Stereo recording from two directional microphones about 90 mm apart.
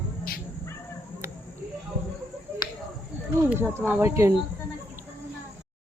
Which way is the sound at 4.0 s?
30° right (ahead or behind).